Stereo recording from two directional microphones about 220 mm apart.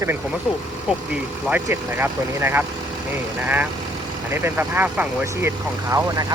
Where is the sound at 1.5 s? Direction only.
10° right (ahead or behind).